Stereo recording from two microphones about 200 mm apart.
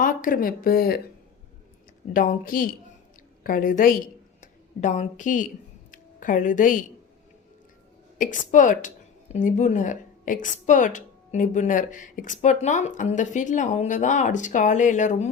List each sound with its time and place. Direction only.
0.0 s speech: 45° left (ahead or behind)
2.1 s a woman's voice: 45° left (ahead or behind)
8.2 s a woman's voice: 40° left (ahead or behind)